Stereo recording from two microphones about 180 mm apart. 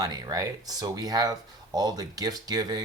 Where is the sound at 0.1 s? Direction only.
20° right (ahead or behind).